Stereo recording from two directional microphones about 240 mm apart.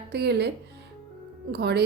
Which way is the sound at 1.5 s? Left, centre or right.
Right.